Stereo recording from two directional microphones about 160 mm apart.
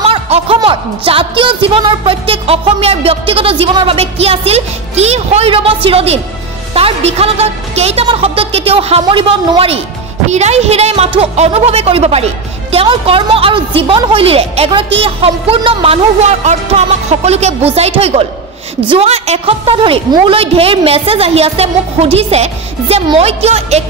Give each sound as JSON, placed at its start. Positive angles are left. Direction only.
{"t": 0.0, "sound": "a woman's voice", "side_deg": -35}